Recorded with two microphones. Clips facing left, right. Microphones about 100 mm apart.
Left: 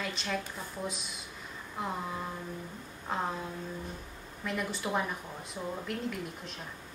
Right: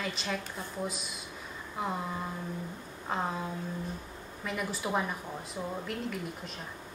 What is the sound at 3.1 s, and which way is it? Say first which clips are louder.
Speech: right 1 dB; centre (ahead or behind).